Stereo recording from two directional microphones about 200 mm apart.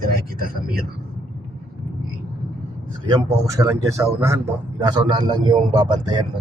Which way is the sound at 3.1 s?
15° right (ahead or behind).